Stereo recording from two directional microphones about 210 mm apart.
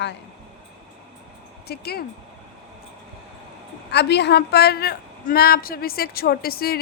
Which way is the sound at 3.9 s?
55° left (ahead or behind).